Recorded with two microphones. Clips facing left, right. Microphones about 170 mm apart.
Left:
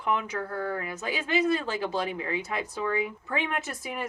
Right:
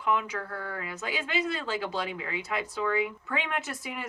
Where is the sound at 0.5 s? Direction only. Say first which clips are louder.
Left 5 dB; 45° left (ahead or behind).